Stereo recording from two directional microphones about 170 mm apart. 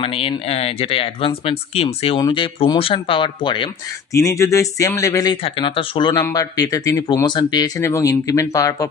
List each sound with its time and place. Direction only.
0.0 s speech: 35° left (ahead or behind)
4.1 s speech: 20° left (ahead or behind)